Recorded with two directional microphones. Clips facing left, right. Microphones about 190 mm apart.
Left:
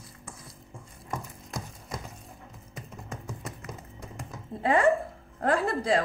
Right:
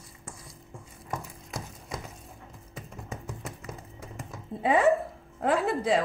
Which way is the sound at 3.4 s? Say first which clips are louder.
Even; centre (ahead or behind).